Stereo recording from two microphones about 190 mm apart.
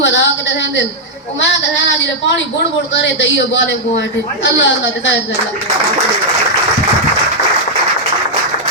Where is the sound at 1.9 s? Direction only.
75° left (ahead or behind).